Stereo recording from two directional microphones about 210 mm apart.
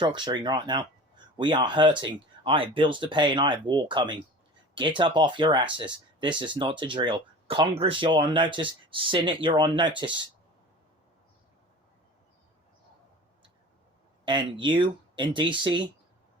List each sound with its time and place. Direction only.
0.0 s speech: 20° right (ahead or behind)
14.3 s speech: 20° right (ahead or behind)